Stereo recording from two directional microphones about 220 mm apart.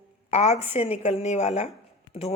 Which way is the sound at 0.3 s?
30° left (ahead or behind).